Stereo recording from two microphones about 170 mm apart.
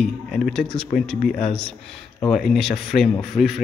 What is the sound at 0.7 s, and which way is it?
Speech, 40° left (ahead or behind).